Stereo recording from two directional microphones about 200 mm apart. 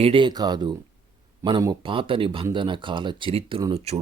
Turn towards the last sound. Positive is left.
turn(degrees=-30)  # may be behind; listen again after turning